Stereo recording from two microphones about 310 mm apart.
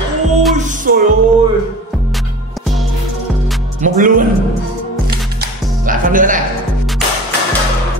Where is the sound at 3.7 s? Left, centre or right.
Right.